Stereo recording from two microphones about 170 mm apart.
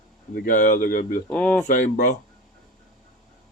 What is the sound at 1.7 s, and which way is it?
Speech, 50° left (ahead or behind).